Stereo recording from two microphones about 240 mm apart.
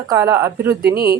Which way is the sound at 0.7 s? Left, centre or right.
Right.